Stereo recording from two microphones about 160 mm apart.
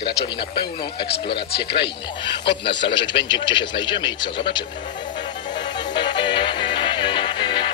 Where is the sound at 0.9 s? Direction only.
90° left.